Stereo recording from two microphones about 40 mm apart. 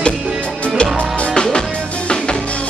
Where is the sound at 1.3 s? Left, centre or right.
Centre.